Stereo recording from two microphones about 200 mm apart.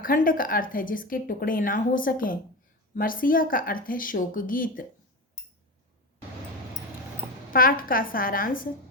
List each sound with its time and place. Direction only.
0.0 s a woman's voice: 45° left (ahead or behind)
7.5 s a woman's voice: 45° left (ahead or behind)